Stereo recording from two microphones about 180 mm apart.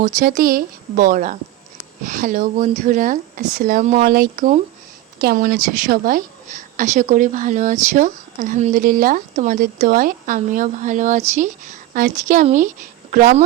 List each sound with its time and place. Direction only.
0.0 s a woman's voice: 45° right (ahead or behind)
5.2 s a woman's voice: 60° right (ahead or behind)